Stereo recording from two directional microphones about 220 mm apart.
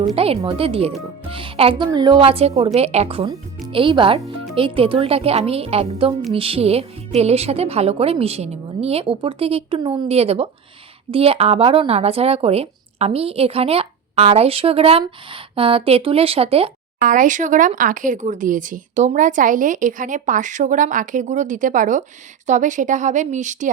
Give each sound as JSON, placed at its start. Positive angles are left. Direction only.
{"t": 0.2, "sound": "speech", "side_deg": -25}